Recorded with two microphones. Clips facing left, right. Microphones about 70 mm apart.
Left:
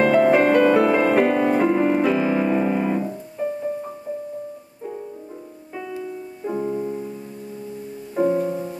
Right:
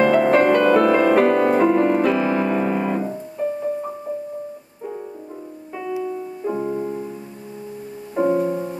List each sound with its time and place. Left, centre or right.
0.0 s music: centre
5.9 s music: centre
8.2 s music: centre